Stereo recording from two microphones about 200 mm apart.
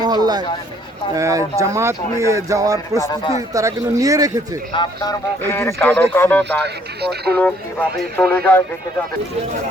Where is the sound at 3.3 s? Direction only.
15° right (ahead or behind).